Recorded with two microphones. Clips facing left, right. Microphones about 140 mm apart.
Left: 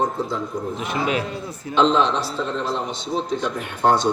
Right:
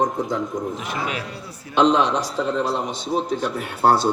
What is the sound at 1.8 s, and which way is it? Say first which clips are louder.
A man's voice: right 1 dB; 15° right (ahead or behind).